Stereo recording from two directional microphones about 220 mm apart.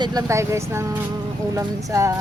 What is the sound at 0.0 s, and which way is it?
Speech, 15° right (ahead or behind).